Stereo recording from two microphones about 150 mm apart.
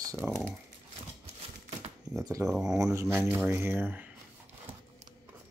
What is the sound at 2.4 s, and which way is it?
Speech, 5° right (ahead or behind).